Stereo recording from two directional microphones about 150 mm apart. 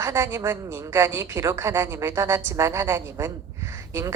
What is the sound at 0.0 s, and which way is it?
A woman's voice, 20° right (ahead or behind).